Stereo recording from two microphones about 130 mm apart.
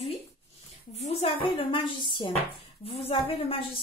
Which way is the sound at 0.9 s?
50° left (ahead or behind).